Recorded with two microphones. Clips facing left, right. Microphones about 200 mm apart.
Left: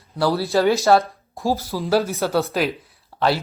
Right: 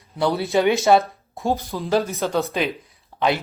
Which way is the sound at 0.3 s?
15° right (ahead or behind).